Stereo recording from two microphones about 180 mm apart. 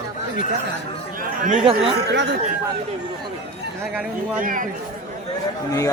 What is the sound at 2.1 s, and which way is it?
Speech, 75° right (ahead or behind).